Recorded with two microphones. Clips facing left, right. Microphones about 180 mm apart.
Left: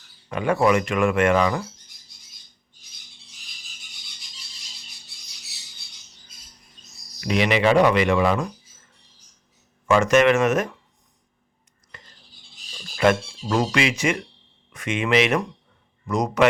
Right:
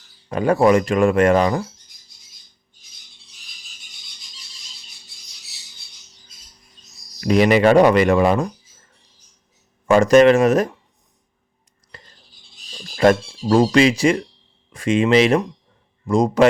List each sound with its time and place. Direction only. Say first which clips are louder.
0.3 s speech: right 5 dB; 35° right (ahead or behind)
7.2 s speech: right 6 dB; 40° right (ahead or behind)
9.8 s speech: right 5 dB; 35° right (ahead or behind)
11.9 s a sound: right 3 dB; 35° right (ahead or behind)
13.0 s speech: right 4 dB; 35° right (ahead or behind)